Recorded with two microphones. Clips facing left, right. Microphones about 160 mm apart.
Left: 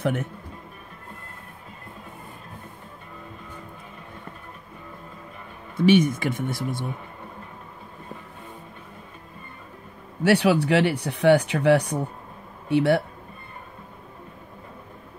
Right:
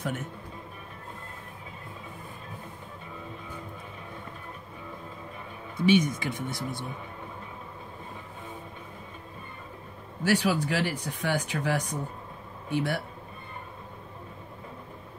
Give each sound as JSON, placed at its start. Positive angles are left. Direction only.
{"t": 0.0, "sound": "speech", "side_deg": 60}
{"t": 5.8, "sound": "speech", "side_deg": 55}
{"t": 10.2, "sound": "speech", "side_deg": 65}